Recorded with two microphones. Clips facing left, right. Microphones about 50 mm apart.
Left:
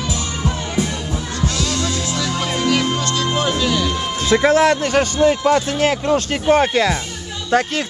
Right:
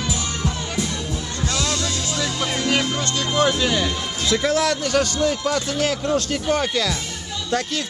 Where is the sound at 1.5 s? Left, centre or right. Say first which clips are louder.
Right 3 dB; right.